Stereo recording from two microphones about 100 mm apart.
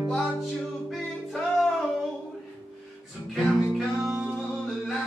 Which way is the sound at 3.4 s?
Centre (ahead or behind).